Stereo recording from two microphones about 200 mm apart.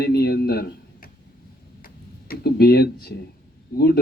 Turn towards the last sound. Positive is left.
turn(degrees=50)  # may be behind; listen again after turning